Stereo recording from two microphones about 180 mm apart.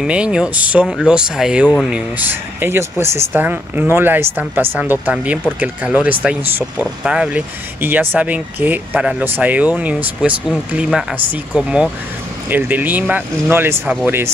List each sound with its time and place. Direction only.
0.0 s speech: 5° right (ahead or behind)